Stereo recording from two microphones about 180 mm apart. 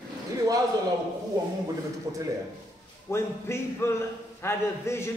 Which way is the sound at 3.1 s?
15° left (ahead or behind).